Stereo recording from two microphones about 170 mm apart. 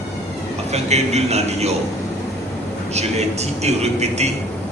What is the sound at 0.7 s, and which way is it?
Speech, 40° right (ahead or behind).